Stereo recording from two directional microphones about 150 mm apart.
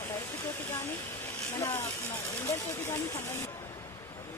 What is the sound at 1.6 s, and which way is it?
Speech, 20° left (ahead or behind).